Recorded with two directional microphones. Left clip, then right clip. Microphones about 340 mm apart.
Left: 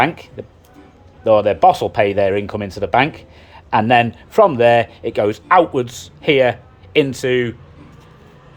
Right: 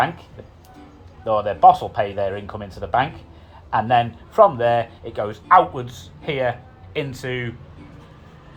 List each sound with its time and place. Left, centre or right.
1.2 s speech: left